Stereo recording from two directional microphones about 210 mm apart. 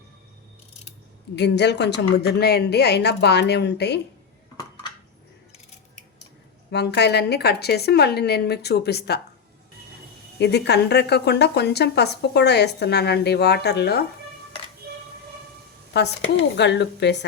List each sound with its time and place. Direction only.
1.4 s a woman's voice: 55° left (ahead or behind)
6.7 s a woman's voice: 55° left (ahead or behind)
10.3 s a woman's voice: 55° left (ahead or behind)
15.9 s speech: 50° left (ahead or behind)